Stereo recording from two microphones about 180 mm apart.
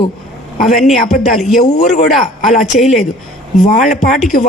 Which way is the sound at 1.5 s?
40° left (ahead or behind).